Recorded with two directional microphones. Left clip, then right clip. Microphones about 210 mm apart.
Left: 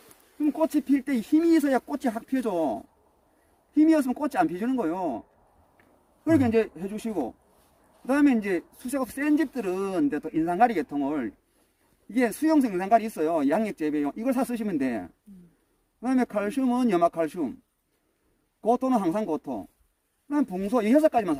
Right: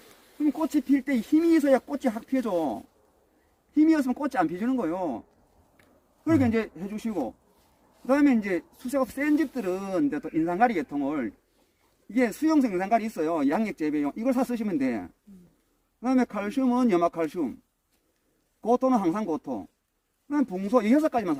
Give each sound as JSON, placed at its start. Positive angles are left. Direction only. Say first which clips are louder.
{"t": 0.4, "sound": "speech", "louder": "left 1 dB", "side_deg": 25}
{"t": 3.8, "sound": "speech", "louder": "left 1 dB", "side_deg": 30}
{"t": 6.2, "sound": "speech", "louder": "left 2 dB", "side_deg": 30}
{"t": 18.6, "sound": "speech", "louder": "right 1 dB", "side_deg": 30}